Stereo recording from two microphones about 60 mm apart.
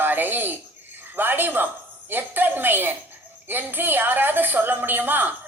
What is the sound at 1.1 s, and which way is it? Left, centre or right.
A woman's voice, right.